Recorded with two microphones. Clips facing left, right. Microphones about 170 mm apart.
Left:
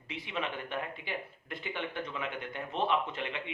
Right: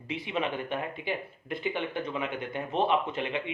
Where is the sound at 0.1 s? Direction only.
15° right (ahead or behind).